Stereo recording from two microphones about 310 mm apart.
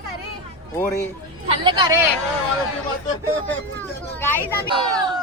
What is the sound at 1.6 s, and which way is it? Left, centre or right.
Speech, centre.